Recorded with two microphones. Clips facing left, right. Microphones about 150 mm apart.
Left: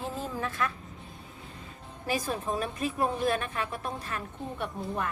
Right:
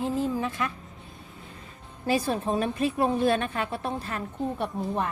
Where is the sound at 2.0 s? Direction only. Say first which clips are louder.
Right 5 dB; 30° right (ahead or behind).